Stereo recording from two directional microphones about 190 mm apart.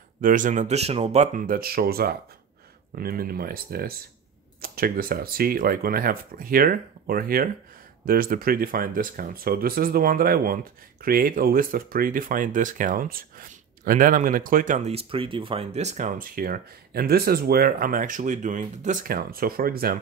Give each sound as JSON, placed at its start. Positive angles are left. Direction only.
{"t": 0.2, "sound": "speech", "side_deg": -45}